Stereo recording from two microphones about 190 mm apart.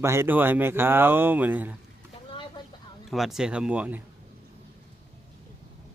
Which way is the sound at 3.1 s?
Centre (ahead or behind).